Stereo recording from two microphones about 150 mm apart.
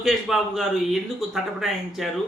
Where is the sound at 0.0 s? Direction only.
Centre (ahead or behind).